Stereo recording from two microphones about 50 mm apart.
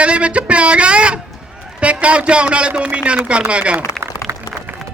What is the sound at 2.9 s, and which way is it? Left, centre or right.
Speech, right.